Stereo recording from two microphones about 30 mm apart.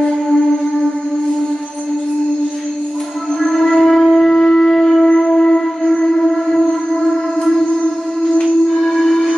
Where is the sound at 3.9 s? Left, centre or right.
Centre.